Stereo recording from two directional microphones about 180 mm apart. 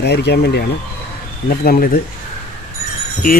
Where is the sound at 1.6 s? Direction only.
55° left (ahead or behind).